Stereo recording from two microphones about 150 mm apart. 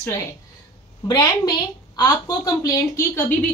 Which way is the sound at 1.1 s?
30° left (ahead or behind).